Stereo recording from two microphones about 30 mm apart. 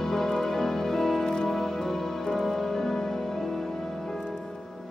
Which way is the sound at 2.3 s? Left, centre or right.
Centre.